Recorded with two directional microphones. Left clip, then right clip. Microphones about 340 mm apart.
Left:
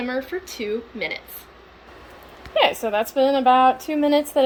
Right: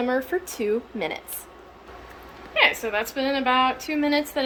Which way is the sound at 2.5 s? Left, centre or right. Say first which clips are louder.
Left 2 dB; left.